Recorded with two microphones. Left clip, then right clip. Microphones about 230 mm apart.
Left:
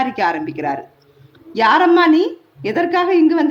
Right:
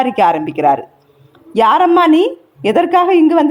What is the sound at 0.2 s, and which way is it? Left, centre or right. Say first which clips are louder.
A woman's voice: right 7 dB; right.